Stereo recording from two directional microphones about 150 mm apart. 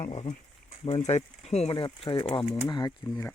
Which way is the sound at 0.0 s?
40° left (ahead or behind).